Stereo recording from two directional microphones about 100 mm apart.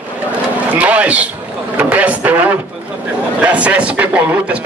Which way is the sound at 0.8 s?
10° right (ahead or behind).